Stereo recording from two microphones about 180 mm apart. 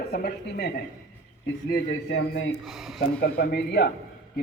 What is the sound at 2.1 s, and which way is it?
Speech, 80° left.